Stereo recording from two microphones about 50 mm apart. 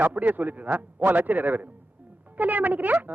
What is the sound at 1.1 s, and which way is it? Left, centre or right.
Speech, right.